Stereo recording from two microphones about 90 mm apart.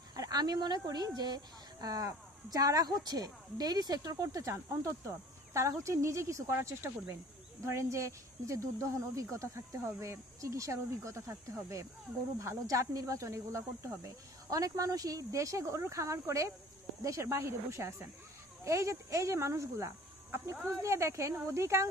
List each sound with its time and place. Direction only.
0.1 s speech: 45° right (ahead or behind)